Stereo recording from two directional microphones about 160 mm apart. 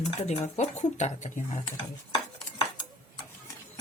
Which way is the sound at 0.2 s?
45° left (ahead or behind).